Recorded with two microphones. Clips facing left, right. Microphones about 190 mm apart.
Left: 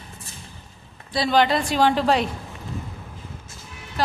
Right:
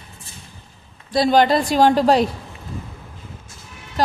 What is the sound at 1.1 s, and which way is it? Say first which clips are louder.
A woman's voice: right 4 dB; 45° right (ahead or behind).